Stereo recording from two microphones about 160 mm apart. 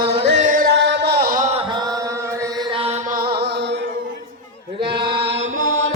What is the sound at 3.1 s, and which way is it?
Music, 70° right (ahead or behind).